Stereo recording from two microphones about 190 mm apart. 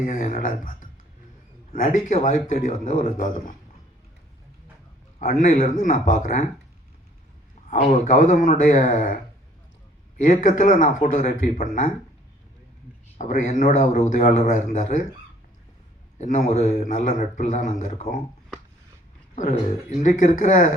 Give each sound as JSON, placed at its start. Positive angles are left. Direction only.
{"t": 0.0, "sound": "a man's voice", "side_deg": 40}
{"t": 5.2, "sound": "a man's voice", "side_deg": 40}
{"t": 7.7, "sound": "a man's voice", "side_deg": 45}
{"t": 10.2, "sound": "a man's voice", "side_deg": 40}
{"t": 13.1, "sound": "a man's voice", "side_deg": 40}
{"t": 16.1, "sound": "a man's voice", "side_deg": 40}
{"t": 20.0, "sound": "a man's voice", "side_deg": 40}